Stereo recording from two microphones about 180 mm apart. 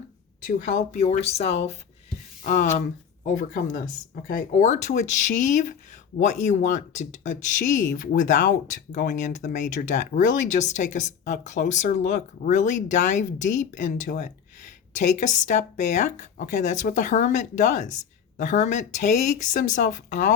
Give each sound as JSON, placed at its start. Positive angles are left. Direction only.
{"t": 0.9, "sound": "speech", "side_deg": 40}